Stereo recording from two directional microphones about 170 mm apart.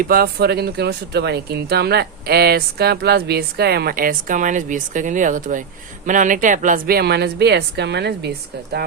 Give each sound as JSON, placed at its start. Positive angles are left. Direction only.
{"t": 0.0, "sound": "speech", "side_deg": -60}